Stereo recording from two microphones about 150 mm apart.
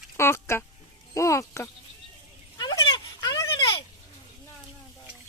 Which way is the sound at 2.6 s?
30° left (ahead or behind).